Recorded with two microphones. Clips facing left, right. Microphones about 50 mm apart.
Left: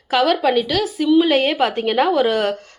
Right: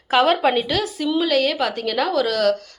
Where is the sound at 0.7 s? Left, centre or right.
Centre.